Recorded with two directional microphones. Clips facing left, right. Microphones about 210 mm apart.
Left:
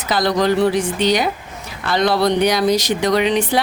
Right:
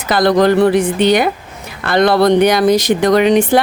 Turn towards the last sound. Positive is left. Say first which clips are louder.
# right 6 dB
turn(degrees=-50)  # may be behind; listen again after turning